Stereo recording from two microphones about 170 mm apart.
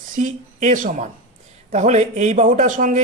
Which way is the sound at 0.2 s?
45° right (ahead or behind).